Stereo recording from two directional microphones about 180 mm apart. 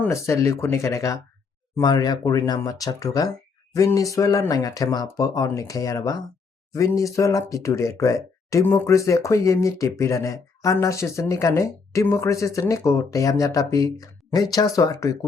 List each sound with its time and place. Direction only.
0.0 s speech: 15° left (ahead or behind)